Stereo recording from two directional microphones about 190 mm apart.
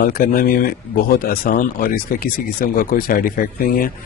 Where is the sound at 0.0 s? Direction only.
50° left (ahead or behind).